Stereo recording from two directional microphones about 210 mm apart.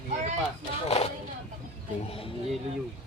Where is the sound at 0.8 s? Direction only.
30° left (ahead or behind).